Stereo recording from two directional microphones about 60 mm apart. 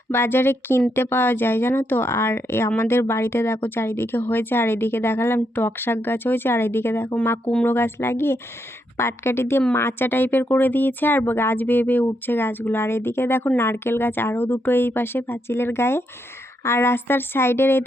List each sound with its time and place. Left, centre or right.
0.1 s a woman's voice: left